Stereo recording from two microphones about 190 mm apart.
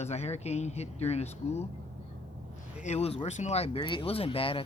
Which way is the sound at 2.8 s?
35° left (ahead or behind).